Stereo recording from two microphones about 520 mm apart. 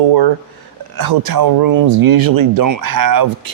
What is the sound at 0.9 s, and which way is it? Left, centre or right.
Speech, right.